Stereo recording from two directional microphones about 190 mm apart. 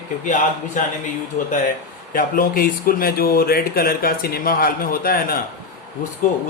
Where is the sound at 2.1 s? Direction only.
50° left (ahead or behind).